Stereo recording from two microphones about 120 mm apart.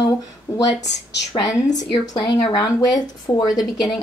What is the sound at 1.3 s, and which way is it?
Speech, 30° left (ahead or behind).